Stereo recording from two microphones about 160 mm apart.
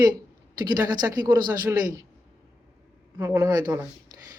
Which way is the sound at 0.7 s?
25° right (ahead or behind).